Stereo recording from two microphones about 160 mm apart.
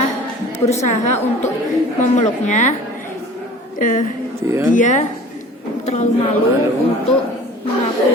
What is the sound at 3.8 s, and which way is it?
Speech, 55° left (ahead or behind).